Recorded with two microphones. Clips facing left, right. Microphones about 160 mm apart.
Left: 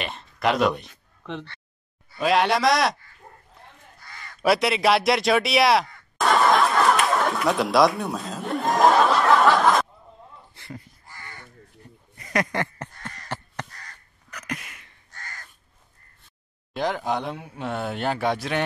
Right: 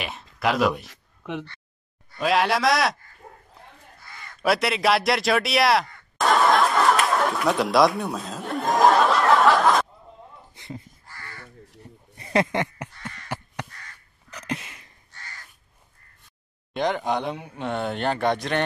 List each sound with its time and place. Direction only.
0.0 s speech: 5° right (ahead or behind)
2.0 s speech: centre (ahead or behind)
4.0 s speech: centre (ahead or behind)
7.2 s chuckle: centre (ahead or behind)
10.5 s a sound: 20° right (ahead or behind)
11.1 s crow: 15° left (ahead or behind)
12.2 s a sound: 25° right (ahead or behind)
13.3 s crow: 10° right (ahead or behind)
13.7 s crow: 35° left (ahead or behind)
14.3 s a sound: 30° right (ahead or behind)
15.0 s crow: 45° left (ahead or behind)
16.7 s speech: centre (ahead or behind)